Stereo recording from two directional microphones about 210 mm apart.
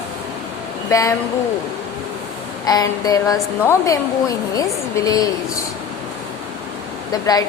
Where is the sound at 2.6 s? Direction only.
15° left (ahead or behind).